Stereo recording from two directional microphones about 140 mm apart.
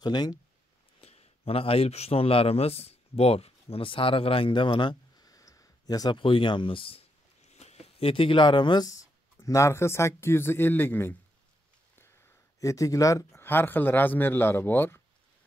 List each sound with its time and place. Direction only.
0.0 s speech: 30° left (ahead or behind)
1.0 s a man's voice: 45° left (ahead or behind); by 15.0 s 15° left (ahead or behind)